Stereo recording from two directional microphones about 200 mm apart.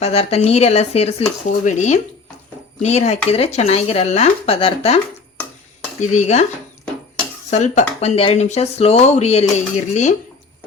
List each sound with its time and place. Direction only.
0.0 s speech: 30° left (ahead or behind)
6.1 s speech: 35° left (ahead or behind)
7.5 s speech: 35° left (ahead or behind)